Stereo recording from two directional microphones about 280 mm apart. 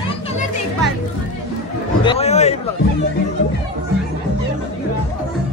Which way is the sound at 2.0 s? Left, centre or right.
Centre.